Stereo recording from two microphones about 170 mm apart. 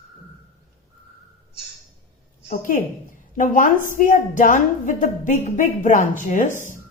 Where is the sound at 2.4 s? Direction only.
50° left (ahead or behind).